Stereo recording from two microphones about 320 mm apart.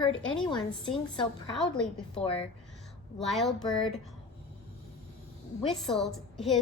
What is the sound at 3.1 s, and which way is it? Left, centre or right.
Speech, centre.